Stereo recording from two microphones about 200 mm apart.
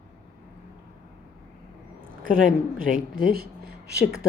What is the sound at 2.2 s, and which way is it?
Speech, 45° right (ahead or behind).